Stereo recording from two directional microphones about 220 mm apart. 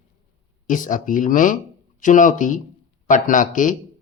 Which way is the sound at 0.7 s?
35° left (ahead or behind).